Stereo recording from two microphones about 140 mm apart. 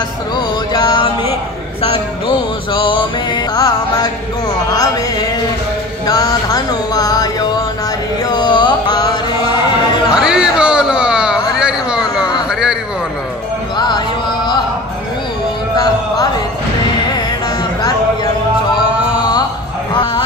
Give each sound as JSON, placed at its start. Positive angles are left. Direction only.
{"t": 0.7, "sound": "music", "side_deg": 35}
{"t": 1.8, "sound": "a sound", "side_deg": 40}
{"t": 3.5, "sound": "music", "side_deg": 25}
{"t": 6.0, "sound": "music", "side_deg": 25}
{"t": 10.2, "sound": "a sound", "side_deg": -5}
{"t": 13.7, "sound": "music", "side_deg": 30}
{"t": 15.7, "sound": "music", "side_deg": 30}